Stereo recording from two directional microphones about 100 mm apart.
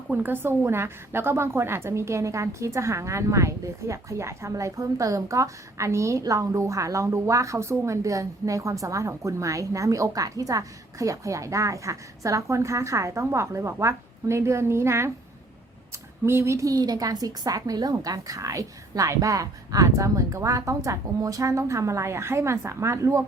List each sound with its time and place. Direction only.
0.1 s a woman's voice: 20° right (ahead or behind)
16.2 s a woman's voice: 25° right (ahead or behind)